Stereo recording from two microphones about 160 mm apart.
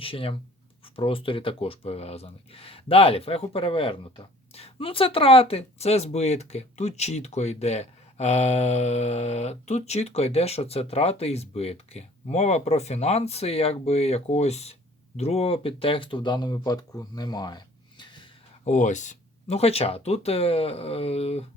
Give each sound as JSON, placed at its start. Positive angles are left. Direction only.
{"t": 0.0, "sound": "speech", "side_deg": 35}
{"t": 18.6, "sound": "speech", "side_deg": 50}